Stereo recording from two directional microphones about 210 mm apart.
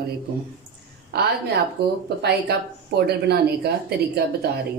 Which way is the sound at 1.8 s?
50° right (ahead or behind).